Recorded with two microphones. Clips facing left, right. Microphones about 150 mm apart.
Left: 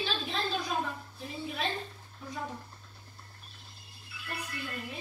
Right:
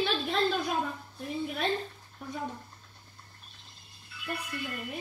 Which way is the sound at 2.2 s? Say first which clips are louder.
Right 3 dB; 55° right (ahead or behind).